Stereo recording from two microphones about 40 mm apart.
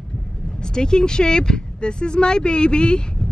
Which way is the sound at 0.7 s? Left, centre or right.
Centre.